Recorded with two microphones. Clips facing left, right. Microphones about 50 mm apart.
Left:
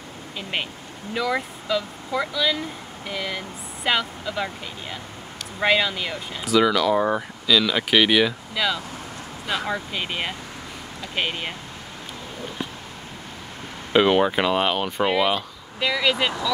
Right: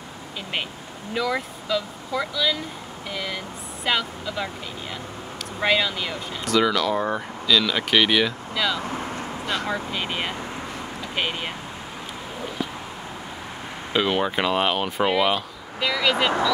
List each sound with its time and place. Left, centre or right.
1.1 s speech: centre
5.6 s speech: centre
8.8 s vehicle: right
9.5 s speech: centre
13.9 s speech: centre